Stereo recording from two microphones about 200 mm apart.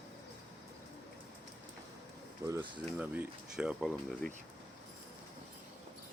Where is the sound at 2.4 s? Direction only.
20° right (ahead or behind).